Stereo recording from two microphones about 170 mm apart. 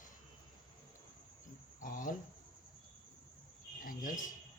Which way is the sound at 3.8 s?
50° left (ahead or behind).